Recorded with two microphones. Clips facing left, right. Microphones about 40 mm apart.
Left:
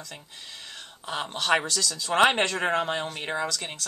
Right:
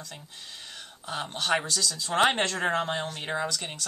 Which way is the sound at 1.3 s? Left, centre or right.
Left.